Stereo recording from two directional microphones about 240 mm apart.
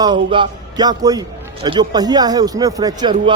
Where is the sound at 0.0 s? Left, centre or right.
Centre.